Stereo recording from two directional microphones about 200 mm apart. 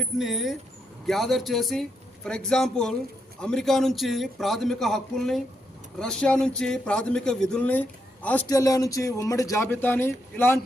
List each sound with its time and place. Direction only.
0.0 s a man's voice: centre (ahead or behind)